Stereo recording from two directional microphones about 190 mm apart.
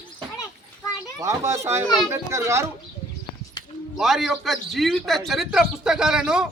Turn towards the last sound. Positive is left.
turn(degrees=-5)  # may be behind; listen again after turning